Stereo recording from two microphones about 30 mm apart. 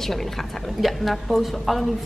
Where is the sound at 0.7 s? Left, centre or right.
Centre.